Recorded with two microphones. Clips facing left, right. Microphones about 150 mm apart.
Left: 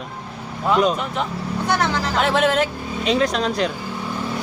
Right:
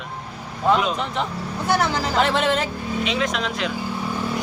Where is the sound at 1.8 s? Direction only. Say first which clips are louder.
Even; centre (ahead or behind).